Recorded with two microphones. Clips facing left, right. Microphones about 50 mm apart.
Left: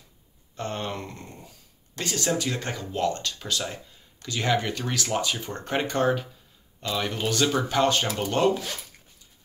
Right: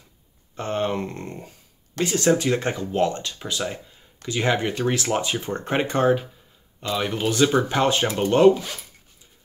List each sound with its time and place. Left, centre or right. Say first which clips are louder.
0.6 s speech: right 7 dB; right
1.1 s speech: right 8 dB; right
2.1 s speech: right 7 dB; right